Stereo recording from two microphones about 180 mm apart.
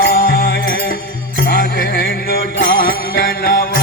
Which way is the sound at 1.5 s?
60° left (ahead or behind).